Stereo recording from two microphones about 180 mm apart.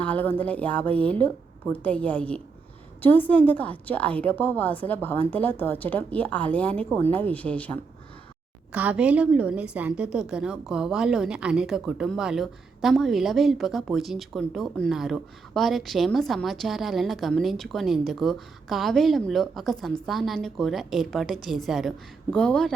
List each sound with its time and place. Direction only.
0.0 s speech: 10° left (ahead or behind)
8.7 s a woman's voice: 5° right (ahead or behind)